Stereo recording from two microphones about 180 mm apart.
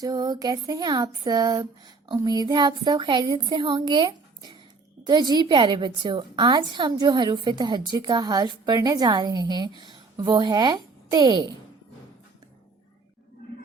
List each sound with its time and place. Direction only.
0.0 s a woman's voice: 20° right (ahead or behind)